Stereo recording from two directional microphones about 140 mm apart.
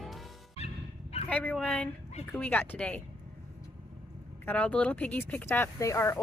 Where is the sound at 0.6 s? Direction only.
50° left (ahead or behind).